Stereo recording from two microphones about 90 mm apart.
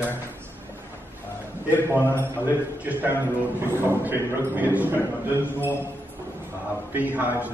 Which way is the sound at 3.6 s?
25° right (ahead or behind).